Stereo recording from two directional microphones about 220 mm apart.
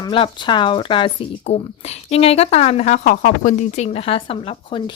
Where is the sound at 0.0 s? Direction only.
20° left (ahead or behind).